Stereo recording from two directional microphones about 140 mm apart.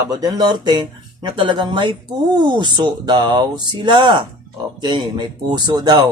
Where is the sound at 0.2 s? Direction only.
30° right (ahead or behind).